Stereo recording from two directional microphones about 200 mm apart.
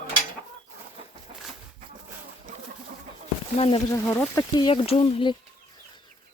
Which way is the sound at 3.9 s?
15° left (ahead or behind).